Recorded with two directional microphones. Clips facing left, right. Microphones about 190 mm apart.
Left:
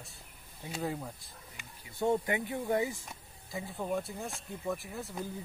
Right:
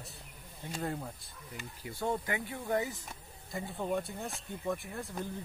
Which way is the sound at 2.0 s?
25° left (ahead or behind).